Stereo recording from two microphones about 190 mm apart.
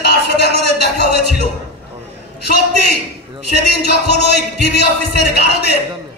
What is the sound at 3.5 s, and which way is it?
Speech, 60° left (ahead or behind).